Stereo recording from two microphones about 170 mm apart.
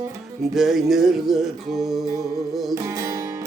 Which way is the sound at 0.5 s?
Centre (ahead or behind).